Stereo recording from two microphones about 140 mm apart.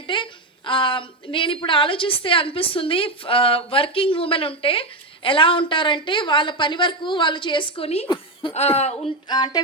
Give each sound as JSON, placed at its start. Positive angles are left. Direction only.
{"t": 0.1, "sound": "a woman's voice", "side_deg": 35}
{"t": 8.1, "sound": "chuckle", "side_deg": 35}
{"t": 8.5, "sound": "speech", "side_deg": 50}
{"t": 9.3, "sound": "speech", "side_deg": 30}